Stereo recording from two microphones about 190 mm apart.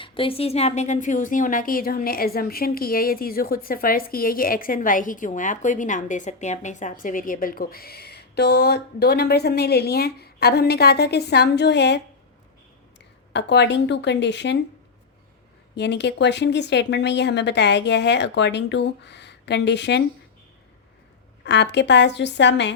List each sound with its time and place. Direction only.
0.0 s a woman's voice: 25° left (ahead or behind); by 12.0 s 65° left (ahead or behind)
13.3 s speech: 65° left (ahead or behind)
15.7 s speech: 65° left (ahead or behind)
21.4 s speech: 65° left (ahead or behind)